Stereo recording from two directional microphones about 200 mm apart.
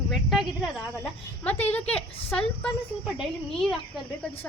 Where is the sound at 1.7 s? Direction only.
5° left (ahead or behind).